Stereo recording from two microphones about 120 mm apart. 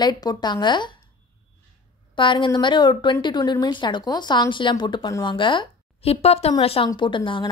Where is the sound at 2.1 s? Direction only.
45° left (ahead or behind).